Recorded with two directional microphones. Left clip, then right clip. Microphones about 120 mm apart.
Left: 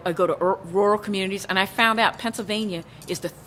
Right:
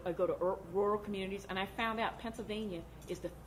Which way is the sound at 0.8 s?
20° left (ahead or behind).